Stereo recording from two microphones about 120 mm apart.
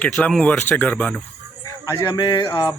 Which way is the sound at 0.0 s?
10° left (ahead or behind).